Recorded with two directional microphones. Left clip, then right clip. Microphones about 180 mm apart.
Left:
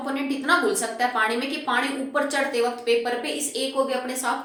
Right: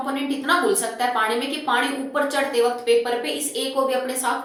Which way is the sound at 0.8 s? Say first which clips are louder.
Right 1 dB; 30° left (ahead or behind).